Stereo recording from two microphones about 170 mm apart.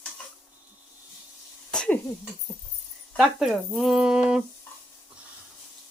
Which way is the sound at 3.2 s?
Centre (ahead or behind).